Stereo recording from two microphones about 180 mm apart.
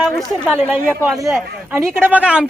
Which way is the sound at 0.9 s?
15° right (ahead or behind).